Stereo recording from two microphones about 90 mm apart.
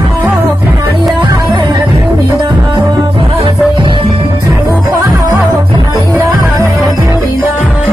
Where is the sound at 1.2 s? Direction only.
55° right (ahead or behind).